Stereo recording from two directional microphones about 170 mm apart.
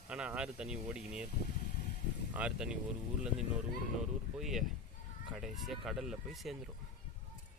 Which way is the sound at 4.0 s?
Centre (ahead or behind).